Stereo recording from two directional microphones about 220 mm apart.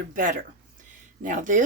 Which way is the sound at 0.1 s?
40° right (ahead or behind).